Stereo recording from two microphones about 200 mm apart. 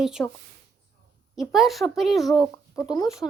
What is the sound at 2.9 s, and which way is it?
Speech, 20° left (ahead or behind).